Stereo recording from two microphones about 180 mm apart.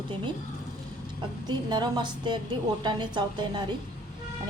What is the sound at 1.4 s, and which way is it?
A woman's voice, 25° right (ahead or behind).